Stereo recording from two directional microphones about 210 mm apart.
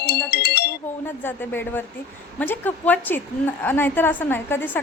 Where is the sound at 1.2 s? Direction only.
10° left (ahead or behind).